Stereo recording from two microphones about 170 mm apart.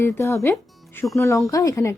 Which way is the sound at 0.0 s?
15° left (ahead or behind).